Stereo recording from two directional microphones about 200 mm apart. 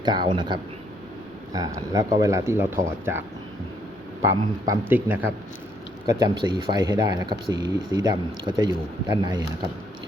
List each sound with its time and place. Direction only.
0.0 s speech: 20° right (ahead or behind)
4.2 s speech: 15° right (ahead or behind)
6.1 s speech: 20° right (ahead or behind)